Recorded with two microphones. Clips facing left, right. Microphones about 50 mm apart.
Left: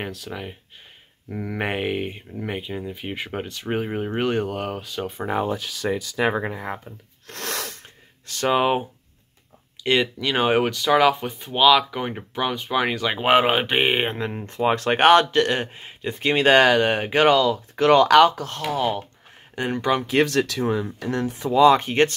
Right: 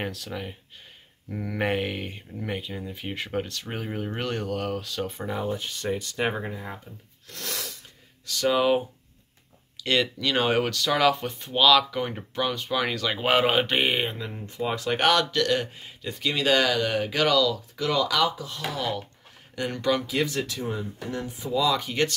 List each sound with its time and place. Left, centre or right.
0.0 s speech: centre
5.3 s speech: left
7.2 s a sound: left
9.8 s speech: left
14.1 s speech: left
17.8 s speech: left
18.6 s speech: left
20.2 s speech: left
21.6 s speech: left